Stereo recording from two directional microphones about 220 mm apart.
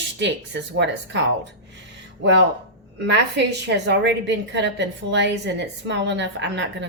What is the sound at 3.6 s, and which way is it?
A woman's voice, 55° right (ahead or behind).